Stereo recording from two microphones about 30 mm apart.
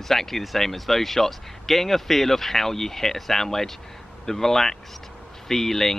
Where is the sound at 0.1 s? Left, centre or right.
Centre.